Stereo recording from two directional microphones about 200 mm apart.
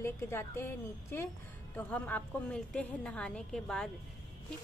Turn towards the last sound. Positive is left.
turn(degrees=5)  # may be behind; listen again after turning